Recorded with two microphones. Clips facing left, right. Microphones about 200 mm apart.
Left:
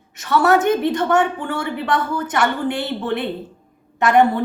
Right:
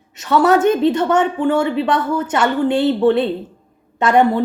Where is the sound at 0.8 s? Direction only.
25° right (ahead or behind).